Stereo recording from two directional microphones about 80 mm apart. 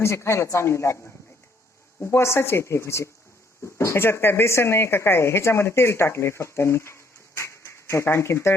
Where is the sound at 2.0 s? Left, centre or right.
Left.